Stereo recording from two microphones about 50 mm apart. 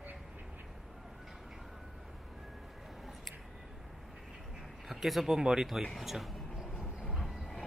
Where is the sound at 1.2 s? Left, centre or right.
Centre.